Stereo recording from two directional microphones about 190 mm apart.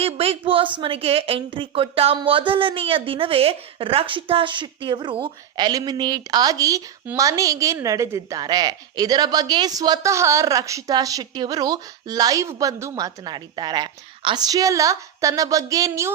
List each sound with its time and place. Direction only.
0.0 s a woman's voice: 30° right (ahead or behind)